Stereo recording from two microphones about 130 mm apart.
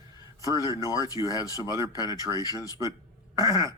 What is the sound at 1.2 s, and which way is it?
Speech, 30° left (ahead or behind).